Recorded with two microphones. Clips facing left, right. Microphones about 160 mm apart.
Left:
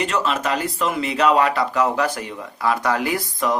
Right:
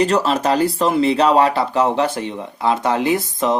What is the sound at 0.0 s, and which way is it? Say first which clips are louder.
Speech: right 6 dB; 35° right (ahead or behind).